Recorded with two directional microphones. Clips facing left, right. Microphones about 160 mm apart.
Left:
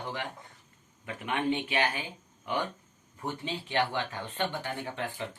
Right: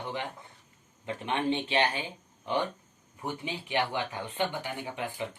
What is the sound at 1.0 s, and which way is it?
Speech, 30° right (ahead or behind).